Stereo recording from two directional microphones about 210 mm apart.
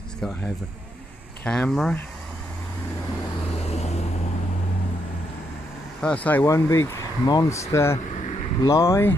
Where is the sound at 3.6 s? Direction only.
30° left (ahead or behind).